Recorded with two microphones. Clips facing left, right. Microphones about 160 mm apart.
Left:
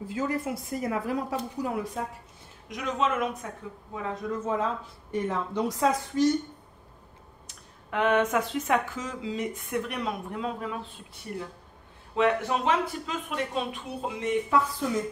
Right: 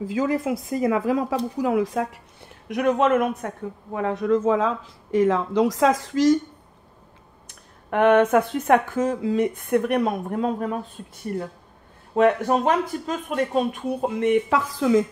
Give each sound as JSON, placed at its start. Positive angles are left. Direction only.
{"t": 0.0, "sound": "speech", "side_deg": -90}
{"t": 2.7, "sound": "speech", "side_deg": -60}
{"t": 7.4, "sound": "speech", "side_deg": -55}
{"t": 12.2, "sound": "speech", "side_deg": -45}